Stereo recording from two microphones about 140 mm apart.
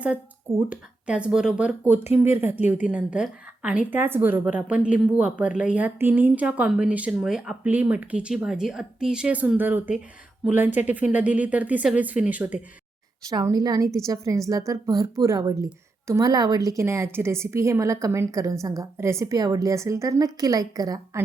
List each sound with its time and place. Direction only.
0.7 s speech: 10° right (ahead or behind)
13.3 s a woman's voice: 30° right (ahead or behind)